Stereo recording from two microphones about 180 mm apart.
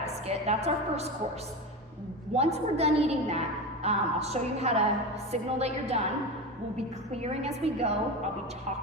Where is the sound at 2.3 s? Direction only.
35° right (ahead or behind).